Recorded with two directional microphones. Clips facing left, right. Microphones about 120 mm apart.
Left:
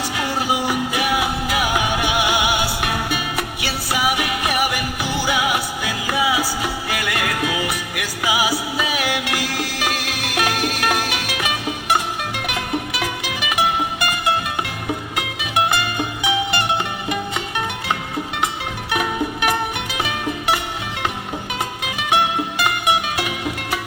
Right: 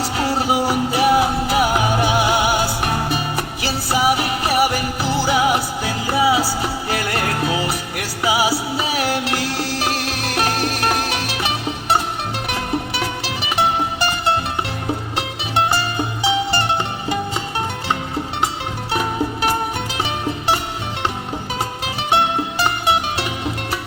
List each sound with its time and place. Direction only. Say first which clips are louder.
0.0 s music: right 3 dB; 30° right (ahead or behind)
18.9 s music: right 1 dB; 35° right (ahead or behind)
22.1 s music: right 1 dB; 30° right (ahead or behind)